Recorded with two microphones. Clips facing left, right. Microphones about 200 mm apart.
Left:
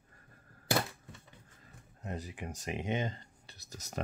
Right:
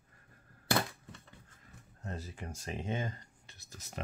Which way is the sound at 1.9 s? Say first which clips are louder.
Left 2 dB; 15° left (ahead or behind).